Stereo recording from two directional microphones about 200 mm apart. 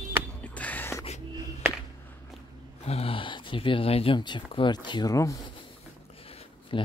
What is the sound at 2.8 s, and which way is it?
Speech, 30° left (ahead or behind).